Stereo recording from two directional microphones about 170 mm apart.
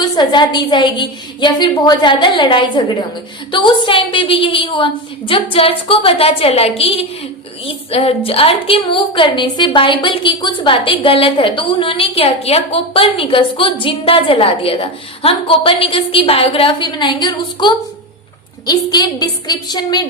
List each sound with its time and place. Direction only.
0.0 s a woman's voice: 25° left (ahead or behind)